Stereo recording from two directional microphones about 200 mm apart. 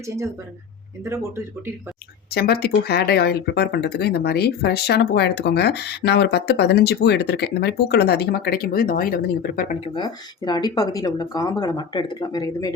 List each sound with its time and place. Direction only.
1.0 s speech: 15° right (ahead or behind)
2.3 s speech: 50° left (ahead or behind)
9.8 s speech: 20° left (ahead or behind)